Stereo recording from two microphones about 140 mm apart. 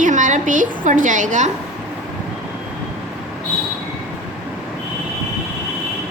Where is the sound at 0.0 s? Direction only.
65° right (ahead or behind).